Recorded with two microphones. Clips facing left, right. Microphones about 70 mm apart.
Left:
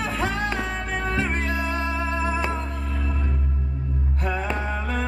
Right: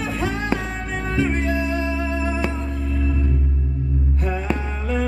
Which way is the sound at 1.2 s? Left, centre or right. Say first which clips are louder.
Right 4 dB; left.